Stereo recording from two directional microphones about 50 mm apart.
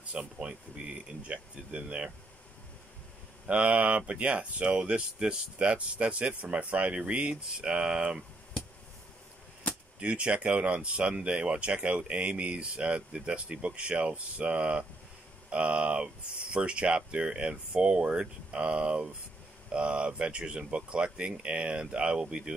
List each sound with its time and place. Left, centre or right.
0.1 s speech: centre
3.4 s speech: right
9.9 s speech: right